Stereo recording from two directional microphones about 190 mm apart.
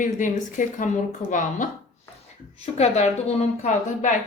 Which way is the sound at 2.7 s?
35° left (ahead or behind).